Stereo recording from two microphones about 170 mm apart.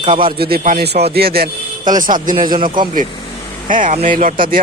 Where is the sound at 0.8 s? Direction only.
70° right (ahead or behind).